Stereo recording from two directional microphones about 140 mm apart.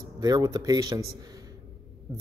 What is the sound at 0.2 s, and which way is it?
Speech, 25° right (ahead or behind).